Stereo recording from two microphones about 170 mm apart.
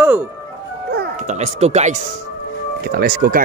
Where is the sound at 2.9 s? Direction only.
60° right (ahead or behind).